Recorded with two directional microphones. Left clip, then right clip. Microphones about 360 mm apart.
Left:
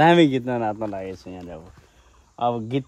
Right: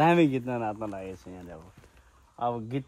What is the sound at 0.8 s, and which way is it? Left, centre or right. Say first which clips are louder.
Speech: left 7 dB; left.